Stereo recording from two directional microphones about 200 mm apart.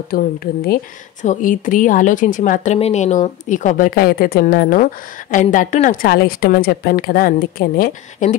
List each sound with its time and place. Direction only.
0.1 s a woman's voice: 50° left (ahead or behind)